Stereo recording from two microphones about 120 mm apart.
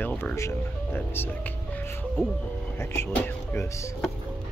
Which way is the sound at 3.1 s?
15° left (ahead or behind).